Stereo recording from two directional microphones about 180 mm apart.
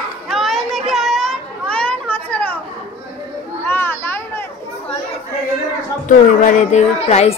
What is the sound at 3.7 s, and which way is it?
Children playing, 10° left (ahead or behind).